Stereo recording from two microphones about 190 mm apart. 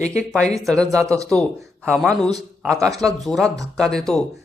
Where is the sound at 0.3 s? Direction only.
5° left (ahead or behind).